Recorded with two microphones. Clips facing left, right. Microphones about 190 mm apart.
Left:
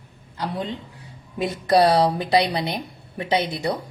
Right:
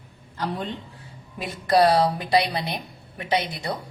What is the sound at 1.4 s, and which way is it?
Speech, 25° left (ahead or behind).